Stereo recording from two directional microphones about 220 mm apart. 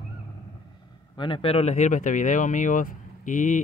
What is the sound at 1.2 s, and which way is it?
Speech, 25° left (ahead or behind).